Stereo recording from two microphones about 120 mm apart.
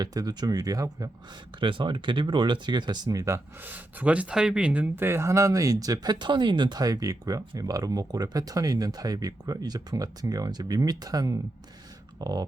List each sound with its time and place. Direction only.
0.0 s speech: 30° right (ahead or behind)
1.5 s speech: 40° right (ahead or behind)